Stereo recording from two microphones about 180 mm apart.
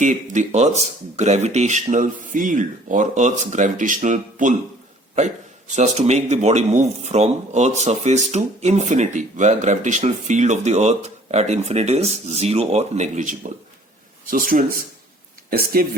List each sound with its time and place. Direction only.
0.0 s a man's voice: 45° right (ahead or behind)